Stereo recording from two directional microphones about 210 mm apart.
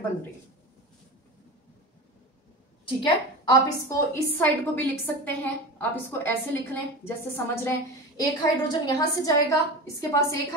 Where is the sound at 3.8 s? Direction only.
10° left (ahead or behind).